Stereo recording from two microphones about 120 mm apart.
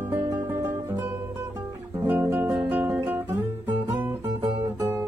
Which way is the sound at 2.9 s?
15° right (ahead or behind).